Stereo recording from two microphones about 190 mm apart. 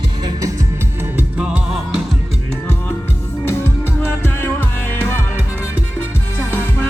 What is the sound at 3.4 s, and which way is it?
Music, 10° left (ahead or behind).